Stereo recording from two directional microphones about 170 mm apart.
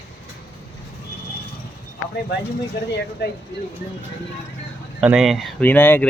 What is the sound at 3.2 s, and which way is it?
Speech, 75° left (ahead or behind).